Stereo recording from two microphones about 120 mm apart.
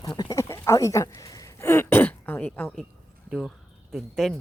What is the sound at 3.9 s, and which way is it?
Speech, 5° left (ahead or behind).